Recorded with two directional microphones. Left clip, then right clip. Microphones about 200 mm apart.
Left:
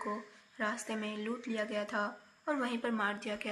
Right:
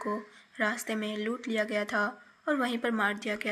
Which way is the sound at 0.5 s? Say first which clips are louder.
Right 6 dB; 25° right (ahead or behind).